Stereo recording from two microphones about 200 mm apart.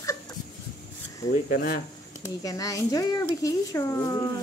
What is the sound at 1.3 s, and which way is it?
Speech, 45° left (ahead or behind).